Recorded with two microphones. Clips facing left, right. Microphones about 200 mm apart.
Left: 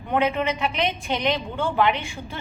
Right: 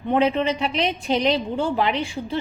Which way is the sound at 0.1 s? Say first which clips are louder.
Right 3 dB; 30° right (ahead or behind).